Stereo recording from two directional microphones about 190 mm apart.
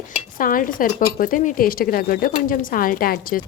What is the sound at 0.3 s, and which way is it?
A woman's voice, 45° left (ahead or behind).